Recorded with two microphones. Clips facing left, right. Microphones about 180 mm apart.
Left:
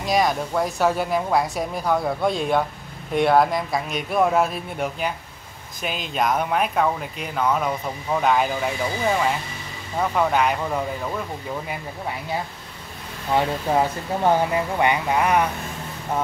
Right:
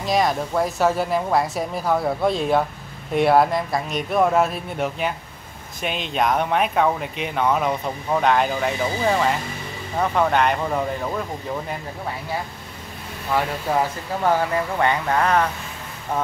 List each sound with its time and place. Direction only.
0.0 s speech: centre (ahead or behind)
13.3 s speech: 20° left (ahead or behind)